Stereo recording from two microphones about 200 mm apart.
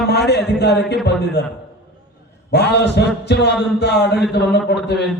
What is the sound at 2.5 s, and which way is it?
A man's voice, 55° left (ahead or behind).